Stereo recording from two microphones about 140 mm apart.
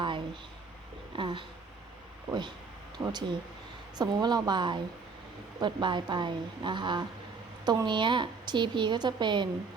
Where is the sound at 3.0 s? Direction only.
30° right (ahead or behind).